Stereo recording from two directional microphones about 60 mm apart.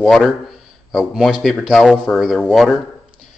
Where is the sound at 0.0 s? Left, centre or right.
Centre.